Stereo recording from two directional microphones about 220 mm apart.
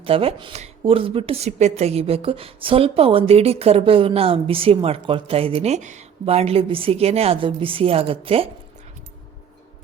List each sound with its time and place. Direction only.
0.0 s speech: 25° right (ahead or behind)